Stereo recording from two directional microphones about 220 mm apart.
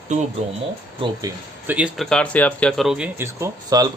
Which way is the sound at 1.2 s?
10° right (ahead or behind).